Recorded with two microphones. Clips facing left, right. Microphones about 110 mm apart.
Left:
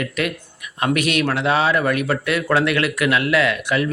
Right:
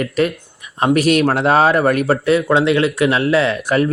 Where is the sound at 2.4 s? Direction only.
20° right (ahead or behind); by 3.9 s 40° right (ahead or behind).